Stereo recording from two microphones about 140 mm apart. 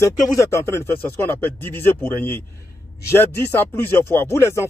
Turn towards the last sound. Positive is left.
turn(degrees=20)  # may be behind; listen again after turning